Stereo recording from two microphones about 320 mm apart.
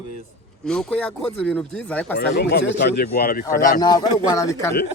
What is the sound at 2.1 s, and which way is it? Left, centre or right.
Speech, left.